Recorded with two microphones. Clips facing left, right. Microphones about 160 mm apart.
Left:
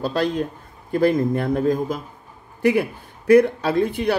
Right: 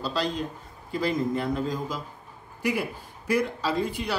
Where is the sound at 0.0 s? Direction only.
55° left (ahead or behind).